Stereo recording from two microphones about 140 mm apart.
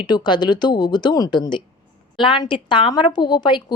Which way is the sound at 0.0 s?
30° left (ahead or behind).